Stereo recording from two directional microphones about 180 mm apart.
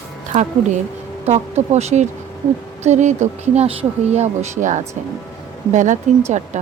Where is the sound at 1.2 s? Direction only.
40° right (ahead or behind).